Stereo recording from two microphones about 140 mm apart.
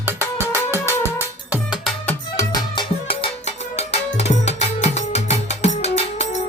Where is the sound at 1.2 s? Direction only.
10° right (ahead or behind).